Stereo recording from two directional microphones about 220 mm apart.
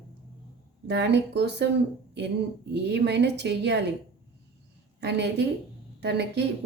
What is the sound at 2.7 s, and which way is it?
Speech, 50° right (ahead or behind).